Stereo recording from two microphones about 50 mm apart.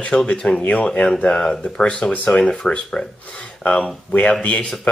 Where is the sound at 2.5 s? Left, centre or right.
Centre.